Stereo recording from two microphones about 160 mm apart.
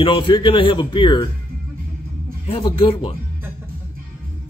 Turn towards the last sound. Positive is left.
turn(degrees=30)  # may be behind; listen again after turning